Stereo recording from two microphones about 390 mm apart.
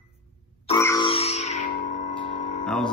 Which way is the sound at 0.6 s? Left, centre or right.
Centre.